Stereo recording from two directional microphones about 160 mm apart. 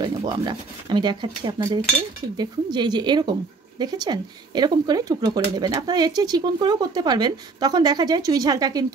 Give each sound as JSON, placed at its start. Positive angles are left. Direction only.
{"t": 0.0, "sound": "speech", "side_deg": -30}